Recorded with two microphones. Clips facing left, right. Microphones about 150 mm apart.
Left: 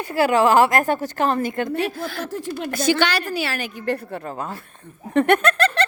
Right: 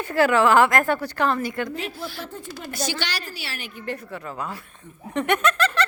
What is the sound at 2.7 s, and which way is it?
A woman's voice, 55° left (ahead or behind).